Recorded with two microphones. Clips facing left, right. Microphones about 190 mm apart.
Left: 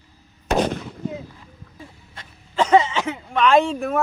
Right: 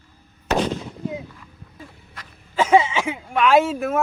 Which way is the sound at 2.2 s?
25° left (ahead or behind).